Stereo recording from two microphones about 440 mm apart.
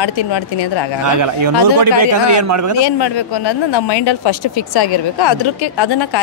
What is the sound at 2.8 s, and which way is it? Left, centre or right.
Speech, left.